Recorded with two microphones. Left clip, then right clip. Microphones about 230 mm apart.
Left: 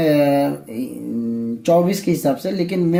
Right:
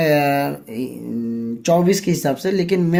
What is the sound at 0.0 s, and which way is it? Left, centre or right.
Speech, right.